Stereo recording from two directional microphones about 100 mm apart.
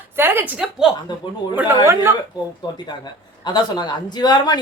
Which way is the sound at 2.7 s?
45° left (ahead or behind).